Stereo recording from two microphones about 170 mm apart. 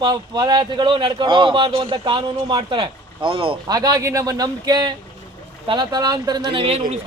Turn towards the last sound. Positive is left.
turn(degrees=-40)  # may be behind; listen again after turning